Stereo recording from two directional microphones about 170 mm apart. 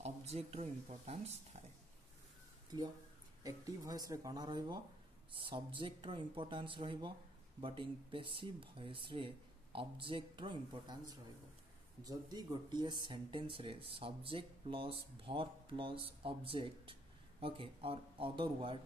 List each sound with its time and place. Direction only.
0.0 s speech: 40° right (ahead or behind)
3.4 s speech: 20° right (ahead or behind)
12.0 s speech: 20° right (ahead or behind)